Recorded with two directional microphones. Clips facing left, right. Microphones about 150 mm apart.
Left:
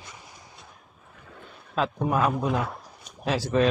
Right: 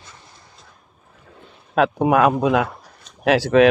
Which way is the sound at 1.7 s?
75° right (ahead or behind).